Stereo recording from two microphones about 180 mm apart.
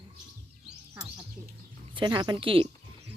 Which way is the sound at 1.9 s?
25° right (ahead or behind).